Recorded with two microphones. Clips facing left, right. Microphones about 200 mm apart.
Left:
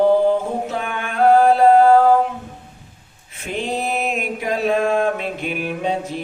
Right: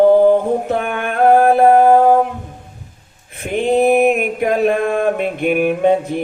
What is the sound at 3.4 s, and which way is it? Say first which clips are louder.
Mantra: right 10 dB; 55° right (ahead or behind).